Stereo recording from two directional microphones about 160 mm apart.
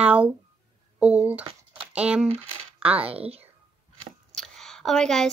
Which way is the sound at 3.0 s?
35° right (ahead or behind).